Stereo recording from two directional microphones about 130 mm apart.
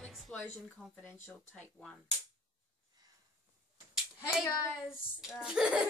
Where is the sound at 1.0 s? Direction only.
15° left (ahead or behind).